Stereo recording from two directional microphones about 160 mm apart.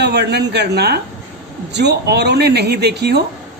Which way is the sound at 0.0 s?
90° right.